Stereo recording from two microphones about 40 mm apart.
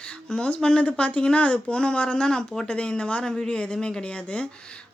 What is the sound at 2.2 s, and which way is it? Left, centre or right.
Speech, centre.